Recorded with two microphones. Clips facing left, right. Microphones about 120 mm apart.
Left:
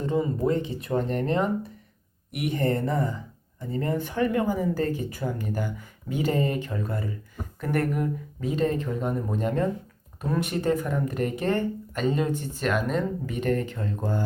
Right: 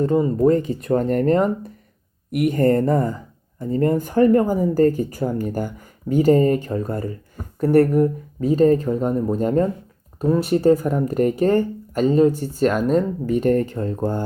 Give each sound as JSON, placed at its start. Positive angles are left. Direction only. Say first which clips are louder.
{"t": 0.0, "sound": "speech", "louder": "right 8 dB", "side_deg": -45}